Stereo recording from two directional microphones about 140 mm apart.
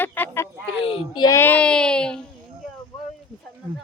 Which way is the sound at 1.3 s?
10° left (ahead or behind).